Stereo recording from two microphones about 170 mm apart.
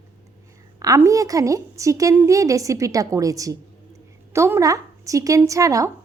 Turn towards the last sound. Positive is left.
turn(degrees=-20)  # may be behind; listen again after turning